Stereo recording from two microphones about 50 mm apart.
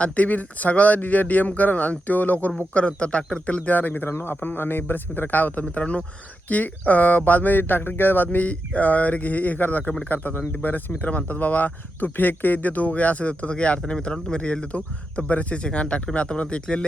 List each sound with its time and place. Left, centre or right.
0.0 s speech: left
2.7 s speech: left